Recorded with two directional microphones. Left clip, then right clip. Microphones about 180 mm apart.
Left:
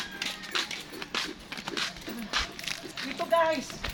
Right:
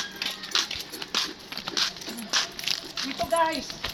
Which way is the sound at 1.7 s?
60° right (ahead or behind).